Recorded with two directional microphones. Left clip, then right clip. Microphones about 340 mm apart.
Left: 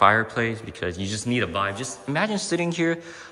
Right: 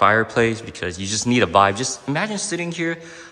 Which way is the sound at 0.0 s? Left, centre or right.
Centre.